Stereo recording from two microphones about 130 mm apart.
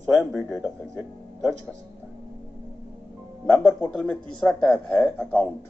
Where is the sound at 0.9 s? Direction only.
25° right (ahead or behind).